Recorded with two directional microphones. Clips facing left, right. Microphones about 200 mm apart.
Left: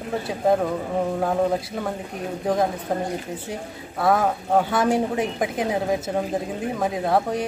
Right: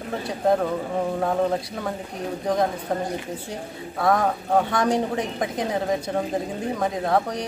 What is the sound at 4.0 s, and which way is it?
Speech, 5° left (ahead or behind).